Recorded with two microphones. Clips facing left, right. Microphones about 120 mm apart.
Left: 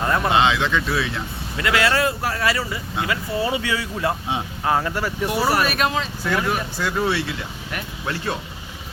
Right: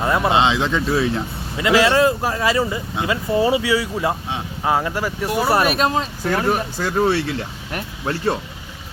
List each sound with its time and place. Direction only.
0.0 s speech: 15° right (ahead or behind)
0.3 s speech: 25° right (ahead or behind)
1.5 s speech: 20° right (ahead or behind)
5.5 s speech: 25° right (ahead or behind)
5.9 s speech: 40° right (ahead or behind)